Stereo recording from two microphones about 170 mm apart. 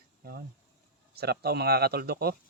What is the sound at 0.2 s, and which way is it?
Speech, 65° right (ahead or behind).